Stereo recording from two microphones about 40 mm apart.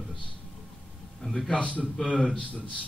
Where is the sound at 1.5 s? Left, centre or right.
Left.